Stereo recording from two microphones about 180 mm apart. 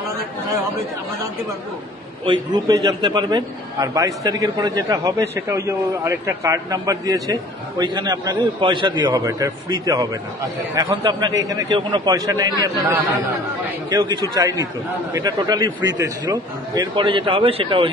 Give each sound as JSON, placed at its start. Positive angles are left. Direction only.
{"t": 2.2, "sound": "a man's voice", "side_deg": -25}